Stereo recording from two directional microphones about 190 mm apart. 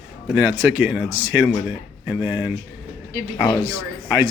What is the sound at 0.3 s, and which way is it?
Speech, 10° right (ahead or behind).